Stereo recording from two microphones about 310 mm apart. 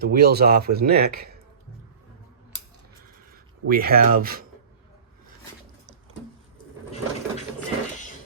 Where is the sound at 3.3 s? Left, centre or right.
Right.